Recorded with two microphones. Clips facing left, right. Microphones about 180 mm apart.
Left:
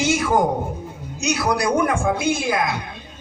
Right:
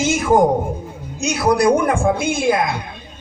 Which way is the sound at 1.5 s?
50° right (ahead or behind).